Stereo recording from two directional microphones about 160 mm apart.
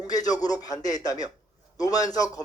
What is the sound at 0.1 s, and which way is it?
Speech, 25° left (ahead or behind).